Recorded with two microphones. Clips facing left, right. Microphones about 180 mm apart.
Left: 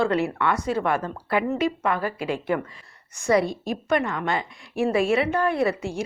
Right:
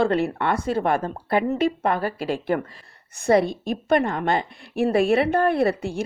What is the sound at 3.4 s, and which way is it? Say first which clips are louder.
Speech: right 1 dB; centre (ahead or behind).